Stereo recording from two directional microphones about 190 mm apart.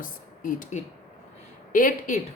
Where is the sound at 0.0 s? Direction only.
45° left (ahead or behind).